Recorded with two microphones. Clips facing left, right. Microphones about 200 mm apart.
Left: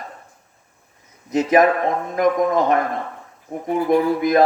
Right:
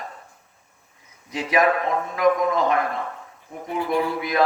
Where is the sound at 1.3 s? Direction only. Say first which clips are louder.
Left 5 dB; 45° left (ahead or behind).